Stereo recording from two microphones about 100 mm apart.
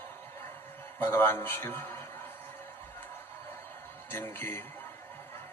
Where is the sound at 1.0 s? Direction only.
20° left (ahead or behind).